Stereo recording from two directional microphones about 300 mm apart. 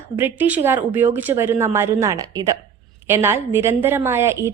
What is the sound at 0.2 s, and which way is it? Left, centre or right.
Speech, centre.